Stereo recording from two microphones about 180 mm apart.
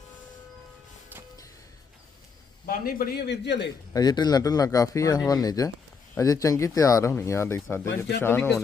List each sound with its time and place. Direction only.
1.1 s music: 10° right (ahead or behind)
2.6 s a man's voice: 55° left (ahead or behind); by 3.7 s 70° left (ahead or behind)
3.9 s speech: 25° left (ahead or behind)